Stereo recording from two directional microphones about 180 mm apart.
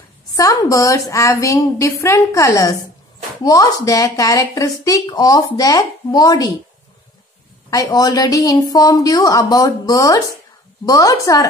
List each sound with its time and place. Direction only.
0.4 s a woman's voice: 20° left (ahead or behind)
7.7 s speech: 20° left (ahead or behind)